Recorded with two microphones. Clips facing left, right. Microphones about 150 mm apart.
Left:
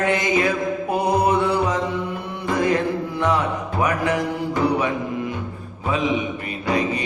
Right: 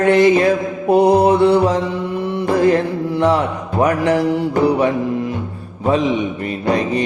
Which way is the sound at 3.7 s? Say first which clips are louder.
Right 7 dB; 35° right (ahead or behind).